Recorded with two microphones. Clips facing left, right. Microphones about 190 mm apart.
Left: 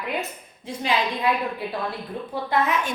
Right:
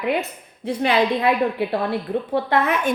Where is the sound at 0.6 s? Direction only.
65° right (ahead or behind).